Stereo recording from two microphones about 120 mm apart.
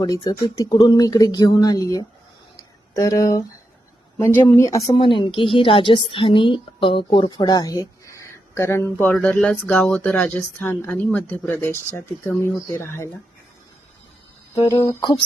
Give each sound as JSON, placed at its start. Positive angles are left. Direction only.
{"t": 0.0, "sound": "speech", "side_deg": 30}
{"t": 2.6, "sound": "a sound", "side_deg": 30}
{"t": 4.2, "sound": "a woman's voice", "side_deg": 20}
{"t": 4.9, "sound": "a woman's voice", "side_deg": 45}
{"t": 14.7, "sound": "speech", "side_deg": 30}